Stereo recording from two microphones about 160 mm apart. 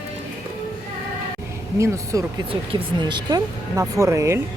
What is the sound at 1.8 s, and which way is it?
Speech, 20° right (ahead or behind).